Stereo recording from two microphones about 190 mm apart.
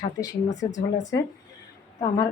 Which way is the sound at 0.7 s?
40° left (ahead or behind).